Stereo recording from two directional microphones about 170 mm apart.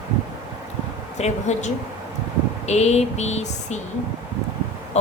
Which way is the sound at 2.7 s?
40° left (ahead or behind).